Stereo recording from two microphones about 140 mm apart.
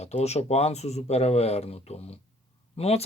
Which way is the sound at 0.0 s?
50° left (ahead or behind).